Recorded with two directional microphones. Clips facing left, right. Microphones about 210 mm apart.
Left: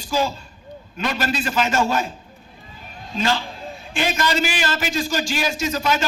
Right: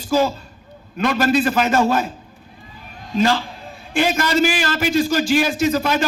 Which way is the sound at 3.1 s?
45° right (ahead or behind).